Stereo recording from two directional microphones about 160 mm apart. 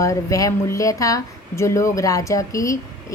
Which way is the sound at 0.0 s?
20° left (ahead or behind).